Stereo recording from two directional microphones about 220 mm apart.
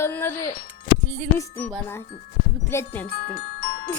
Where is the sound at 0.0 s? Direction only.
10° left (ahead or behind).